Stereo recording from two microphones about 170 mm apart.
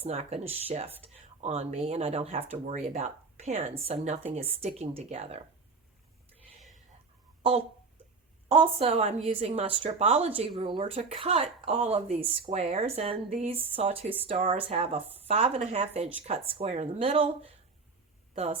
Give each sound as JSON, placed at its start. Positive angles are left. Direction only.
{"t": 0.0, "sound": "a woman's voice", "side_deg": -35}
{"t": 8.5, "sound": "a woman's voice", "side_deg": -35}
{"t": 18.3, "sound": "a woman's voice", "side_deg": -40}